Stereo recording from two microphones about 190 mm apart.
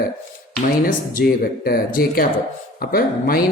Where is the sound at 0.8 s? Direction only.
50° left (ahead or behind).